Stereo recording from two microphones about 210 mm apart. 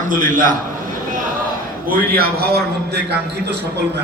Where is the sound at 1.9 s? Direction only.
45° right (ahead or behind).